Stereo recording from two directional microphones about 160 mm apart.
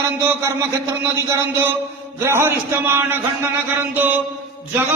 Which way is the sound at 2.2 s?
15° right (ahead or behind).